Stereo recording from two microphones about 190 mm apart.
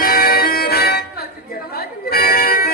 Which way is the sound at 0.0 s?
50° left (ahead or behind).